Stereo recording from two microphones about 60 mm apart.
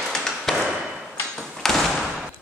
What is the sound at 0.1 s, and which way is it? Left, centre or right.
Chop, centre.